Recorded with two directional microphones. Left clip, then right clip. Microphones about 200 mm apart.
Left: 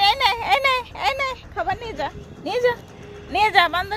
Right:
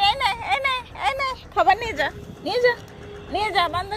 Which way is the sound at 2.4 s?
10° left (ahead or behind).